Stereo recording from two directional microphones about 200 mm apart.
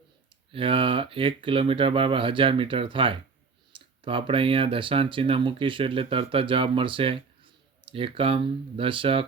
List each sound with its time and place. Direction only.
0.5 s speech: 25° right (ahead or behind)